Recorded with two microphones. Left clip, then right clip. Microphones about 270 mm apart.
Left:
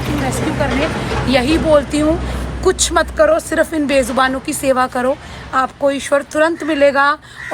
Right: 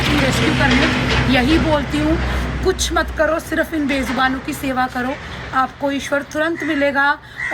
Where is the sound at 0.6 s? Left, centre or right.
Left.